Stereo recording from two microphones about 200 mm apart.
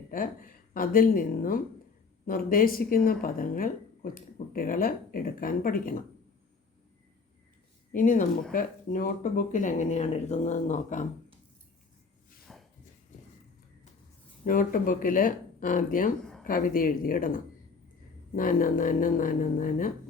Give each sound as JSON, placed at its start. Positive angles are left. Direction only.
{"t": 0.1, "sound": "a woman's voice", "side_deg": 45}
{"t": 7.9, "sound": "speech", "side_deg": 40}
{"t": 12.5, "sound": "walk", "side_deg": 0}
{"t": 14.4, "sound": "a woman's voice", "side_deg": 45}